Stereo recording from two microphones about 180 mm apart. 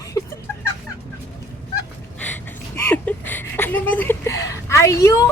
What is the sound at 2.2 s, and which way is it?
Speech, 10° left (ahead or behind).